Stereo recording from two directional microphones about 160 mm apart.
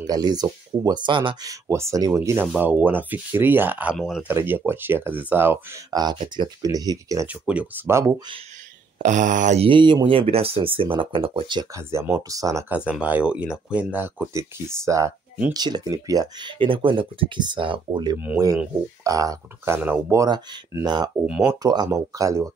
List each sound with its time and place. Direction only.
0.0 s speech: 25° right (ahead or behind)
5.9 s speech: 25° right (ahead or behind)
7.4 s speech: 10° right (ahead or behind)
8.9 s speech: 50° right (ahead or behind)
9.7 s speech: 30° right (ahead or behind)
12.7 s speech: 10° right (ahead or behind); by 18.1 s 30° right (ahead or behind)
18.1 s speech: 10° right (ahead or behind)
19.0 s speech: 20° right (ahead or behind)
21.3 s speech: 5° right (ahead or behind)
21.6 s speech: 25° right (ahead or behind)